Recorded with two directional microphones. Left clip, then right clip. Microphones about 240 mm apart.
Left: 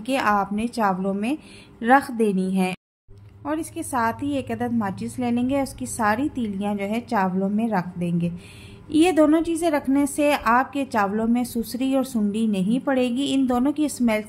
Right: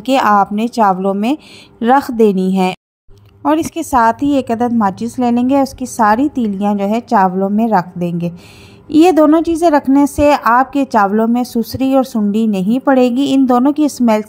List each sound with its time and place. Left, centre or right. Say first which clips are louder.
0.0 s a woman's voice: right 11 dB; right